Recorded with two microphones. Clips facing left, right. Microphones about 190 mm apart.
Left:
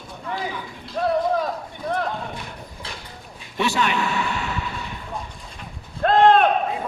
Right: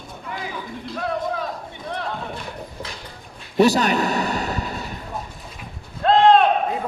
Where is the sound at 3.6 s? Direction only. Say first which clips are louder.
Right 6 dB; 40° right (ahead or behind).